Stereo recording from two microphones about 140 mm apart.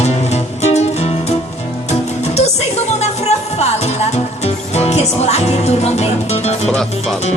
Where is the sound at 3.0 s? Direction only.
50° left (ahead or behind).